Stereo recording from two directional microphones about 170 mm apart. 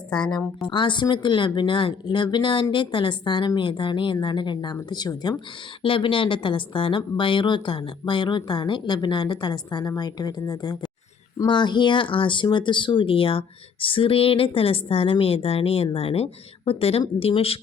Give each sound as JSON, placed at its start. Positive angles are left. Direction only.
{"t": 0.7, "sound": "a woman's voice", "side_deg": 30}